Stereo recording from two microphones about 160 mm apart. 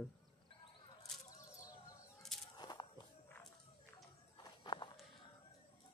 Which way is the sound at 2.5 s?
25° left (ahead or behind).